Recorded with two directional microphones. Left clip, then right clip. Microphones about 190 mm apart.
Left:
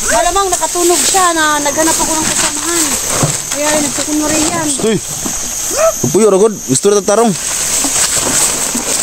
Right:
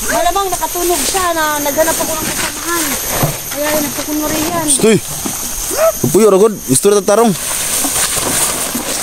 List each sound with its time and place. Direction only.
0.2 s a sound: 40° left (ahead or behind)
1.2 s speech: 60° left (ahead or behind)
3.2 s speech: 55° left (ahead or behind)
4.8 s speech: 65° right (ahead or behind)
5.8 s speech: 5° right (ahead or behind)
8.0 s a sound: centre (ahead or behind)